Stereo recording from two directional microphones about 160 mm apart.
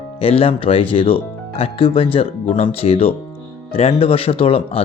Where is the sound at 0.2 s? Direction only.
35° left (ahead or behind).